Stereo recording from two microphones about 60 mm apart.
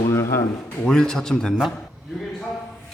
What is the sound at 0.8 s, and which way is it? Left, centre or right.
Speech, centre.